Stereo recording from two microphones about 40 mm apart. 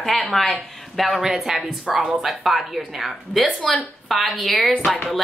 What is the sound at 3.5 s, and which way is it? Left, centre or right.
Speech, left.